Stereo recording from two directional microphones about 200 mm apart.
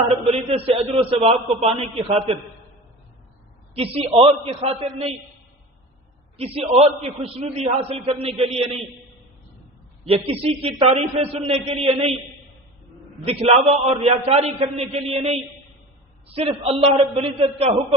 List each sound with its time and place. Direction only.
0.1 s a man's voice: 30° right (ahead or behind)
3.8 s a man's voice: 30° right (ahead or behind)
6.3 s a man's voice: 30° right (ahead or behind)
10.1 s a man's voice: 30° right (ahead or behind)
13.2 s a man's voice: 30° right (ahead or behind)